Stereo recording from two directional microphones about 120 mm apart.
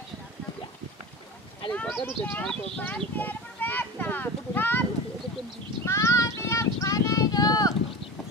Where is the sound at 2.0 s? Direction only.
15° left (ahead or behind).